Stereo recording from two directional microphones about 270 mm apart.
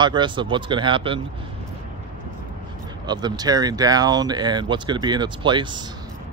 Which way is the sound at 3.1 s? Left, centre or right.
Centre.